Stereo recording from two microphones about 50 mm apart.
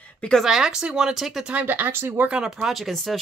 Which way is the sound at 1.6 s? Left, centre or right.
Right.